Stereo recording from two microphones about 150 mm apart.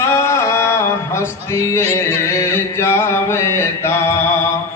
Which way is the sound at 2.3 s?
15° left (ahead or behind).